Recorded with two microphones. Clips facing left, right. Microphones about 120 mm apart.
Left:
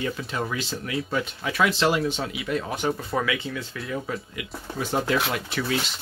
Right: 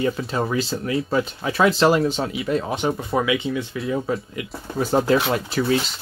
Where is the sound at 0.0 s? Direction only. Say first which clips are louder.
Right 6 dB; 35° right (ahead or behind).